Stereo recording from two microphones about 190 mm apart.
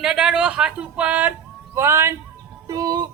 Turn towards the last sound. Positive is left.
turn(degrees=-20)  # may be behind; listen again after turning